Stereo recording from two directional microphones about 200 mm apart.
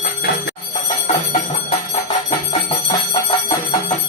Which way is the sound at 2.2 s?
30° left (ahead or behind).